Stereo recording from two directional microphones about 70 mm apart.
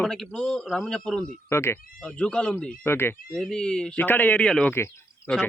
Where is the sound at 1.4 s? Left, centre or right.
Left.